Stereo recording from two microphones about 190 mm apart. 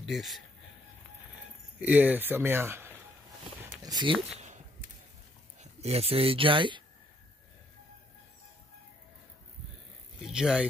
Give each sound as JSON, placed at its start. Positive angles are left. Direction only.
{"t": 0.0, "sound": "speech", "side_deg": 0}
{"t": 1.8, "sound": "speech", "side_deg": -10}
{"t": 3.8, "sound": "speech", "side_deg": -25}
{"t": 5.6, "sound": "speech", "side_deg": -35}
{"t": 10.2, "sound": "speech", "side_deg": -5}